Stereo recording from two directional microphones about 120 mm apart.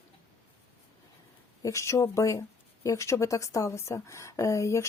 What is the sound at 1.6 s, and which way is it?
A woman's voice, 25° left (ahead or behind).